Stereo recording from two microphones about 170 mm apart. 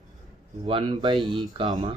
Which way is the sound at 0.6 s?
30° right (ahead or behind).